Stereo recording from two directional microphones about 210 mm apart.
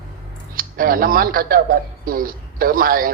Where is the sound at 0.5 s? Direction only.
45° right (ahead or behind).